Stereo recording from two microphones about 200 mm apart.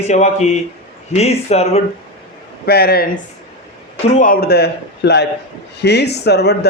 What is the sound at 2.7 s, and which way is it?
Speech, 50° left (ahead or behind).